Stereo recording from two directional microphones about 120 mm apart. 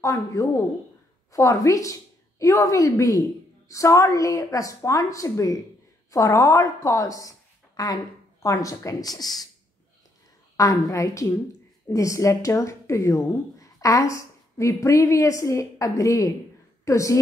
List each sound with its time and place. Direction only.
0.0 s a woman's voice: 30° left (ahead or behind)
10.5 s a woman's voice: 30° left (ahead or behind)